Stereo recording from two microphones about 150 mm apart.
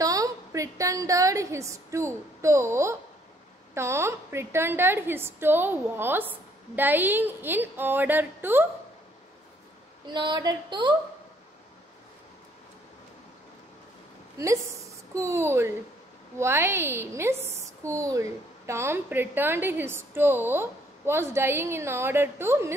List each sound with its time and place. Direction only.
0.0 s a woman's voice: 25° right (ahead or behind)
10.0 s speech: 30° right (ahead or behind)
14.4 s a woman's voice: 20° right (ahead or behind)